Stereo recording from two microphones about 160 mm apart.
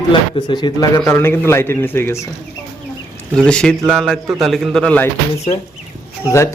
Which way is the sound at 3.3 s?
5° left (ahead or behind).